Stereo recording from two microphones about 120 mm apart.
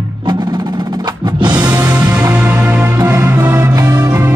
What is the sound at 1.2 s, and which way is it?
Music, 40° right (ahead or behind).